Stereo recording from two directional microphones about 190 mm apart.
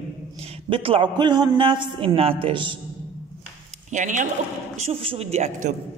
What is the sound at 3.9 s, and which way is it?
A man's voice, 40° right (ahead or behind).